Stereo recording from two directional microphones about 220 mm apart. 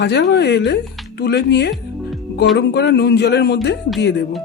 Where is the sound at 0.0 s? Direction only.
50° left (ahead or behind).